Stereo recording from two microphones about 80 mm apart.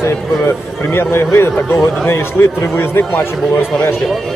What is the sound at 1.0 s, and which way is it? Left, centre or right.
A man's voice, left.